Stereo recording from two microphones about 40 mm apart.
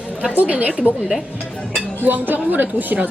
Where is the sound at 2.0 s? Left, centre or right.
Right.